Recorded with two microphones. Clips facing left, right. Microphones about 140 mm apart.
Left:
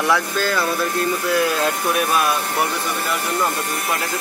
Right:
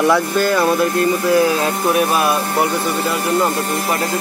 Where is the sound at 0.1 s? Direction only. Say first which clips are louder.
Right 5 dB; 5° right (ahead or behind).